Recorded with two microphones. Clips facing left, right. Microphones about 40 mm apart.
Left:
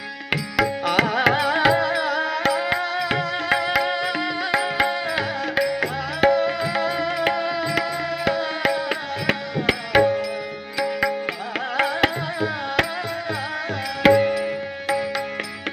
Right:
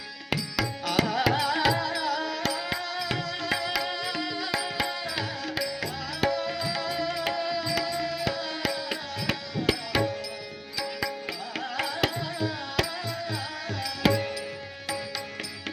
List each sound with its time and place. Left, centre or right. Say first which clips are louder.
0.3 s music: left 8 dB; left
11.8 s music: left 8 dB; left
14.0 s music: left 10 dB; left